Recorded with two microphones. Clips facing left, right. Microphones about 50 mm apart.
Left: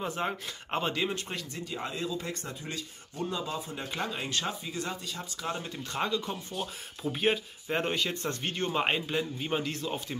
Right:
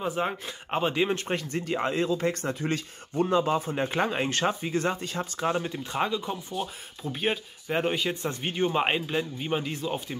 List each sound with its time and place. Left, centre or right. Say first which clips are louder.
0.0 s speech: right 4 dB; centre
1.1 s speech: right 7 dB; right
5.7 s speech: right 3 dB; centre